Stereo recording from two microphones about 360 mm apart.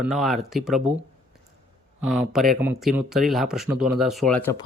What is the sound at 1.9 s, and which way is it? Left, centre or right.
Speech, centre.